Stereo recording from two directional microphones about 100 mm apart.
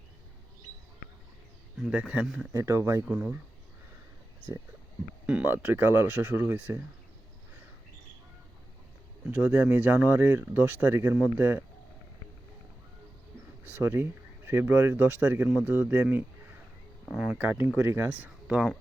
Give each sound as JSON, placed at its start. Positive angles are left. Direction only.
{"t": 1.8, "sound": "speech", "side_deg": -10}
{"t": 2.5, "sound": "speech", "side_deg": -30}
{"t": 3.1, "sound": "speech", "side_deg": -15}
{"t": 5.2, "sound": "speech", "side_deg": -15}
{"t": 9.3, "sound": "speech", "side_deg": -20}
{"t": 13.7, "sound": "speech", "side_deg": -20}